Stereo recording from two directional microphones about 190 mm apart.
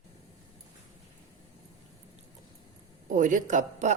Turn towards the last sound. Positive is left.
turn(degrees=-40)  # may be behind; listen again after turning